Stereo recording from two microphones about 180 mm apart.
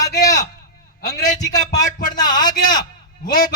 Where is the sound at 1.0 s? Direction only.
55° left (ahead or behind).